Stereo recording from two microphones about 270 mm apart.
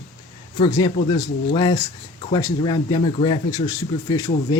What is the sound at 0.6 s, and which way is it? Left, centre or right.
Speech, centre.